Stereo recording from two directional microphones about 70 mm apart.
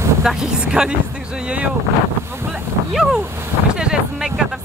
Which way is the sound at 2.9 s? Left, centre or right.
Centre.